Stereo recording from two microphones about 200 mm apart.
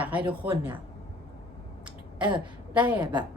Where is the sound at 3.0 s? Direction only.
20° right (ahead or behind).